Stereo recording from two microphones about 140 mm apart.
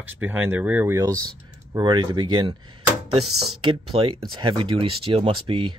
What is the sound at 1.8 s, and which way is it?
Speech, 35° right (ahead or behind).